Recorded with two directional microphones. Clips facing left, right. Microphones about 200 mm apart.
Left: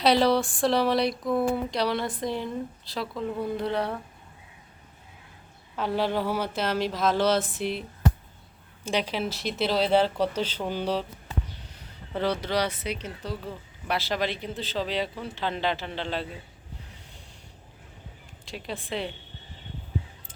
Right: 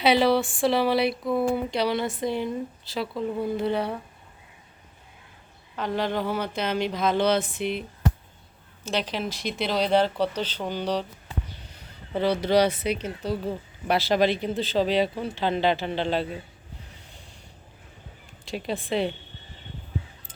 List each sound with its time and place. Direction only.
0.0 s speech: centre (ahead or behind)
5.7 s speech: 5° left (ahead or behind)
12.1 s speech: 5° right (ahead or behind)
18.5 s speech: 15° right (ahead or behind)